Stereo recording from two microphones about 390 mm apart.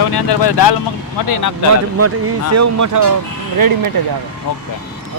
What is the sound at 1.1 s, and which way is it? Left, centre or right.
Speech, left.